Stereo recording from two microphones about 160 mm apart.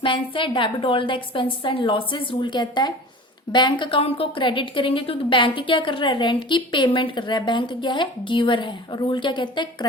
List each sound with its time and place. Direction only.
0.0 s a woman's voice: 30° left (ahead or behind)